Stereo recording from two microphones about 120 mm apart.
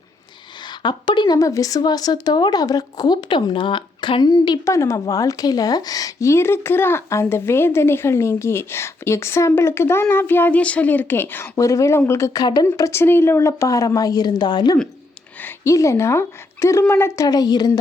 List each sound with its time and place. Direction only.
0.6 s a woman's voice: 40° left (ahead or behind)
12.6 s a woman's voice: 25° left (ahead or behind)
15.4 s a woman's voice: 20° left (ahead or behind)
17.2 s speech: 35° left (ahead or behind)